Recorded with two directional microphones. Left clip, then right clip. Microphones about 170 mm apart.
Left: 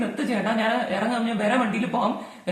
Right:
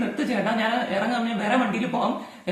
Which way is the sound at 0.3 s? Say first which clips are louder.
Even; 15° left (ahead or behind).